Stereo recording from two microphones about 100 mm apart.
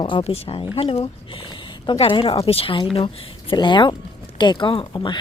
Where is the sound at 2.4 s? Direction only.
75° left (ahead or behind); by 5.1 s 50° left (ahead or behind).